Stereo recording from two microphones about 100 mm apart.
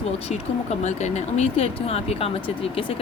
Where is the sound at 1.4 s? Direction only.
75° left (ahead or behind); by 2.9 s 60° left (ahead or behind).